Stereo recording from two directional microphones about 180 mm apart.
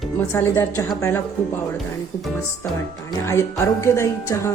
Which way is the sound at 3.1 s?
15° left (ahead or behind).